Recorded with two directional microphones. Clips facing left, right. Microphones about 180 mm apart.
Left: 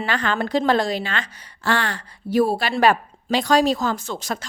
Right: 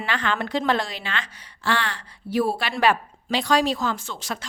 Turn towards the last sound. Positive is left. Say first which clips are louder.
# left 3 dB
turn(degrees=40)  # may be behind; listen again after turning